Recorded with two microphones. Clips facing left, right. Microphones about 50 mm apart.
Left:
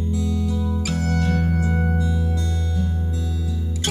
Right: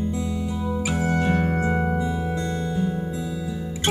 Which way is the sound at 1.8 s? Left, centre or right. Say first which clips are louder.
Even; right.